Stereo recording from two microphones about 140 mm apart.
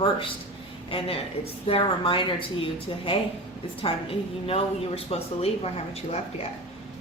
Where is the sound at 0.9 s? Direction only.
40° left (ahead or behind).